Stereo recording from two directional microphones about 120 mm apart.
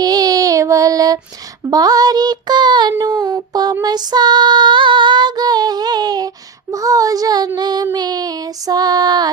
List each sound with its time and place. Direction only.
0.0 s child singing: 30° right (ahead or behind)
1.7 s music: 30° right (ahead or behind)
3.1 s a sound: 20° right (ahead or behind)
3.5 s music: 35° right (ahead or behind)